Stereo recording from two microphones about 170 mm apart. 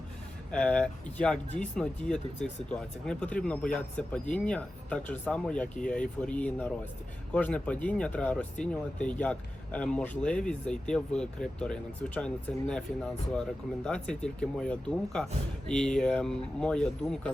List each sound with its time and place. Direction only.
0.5 s speech: 5° left (ahead or behind)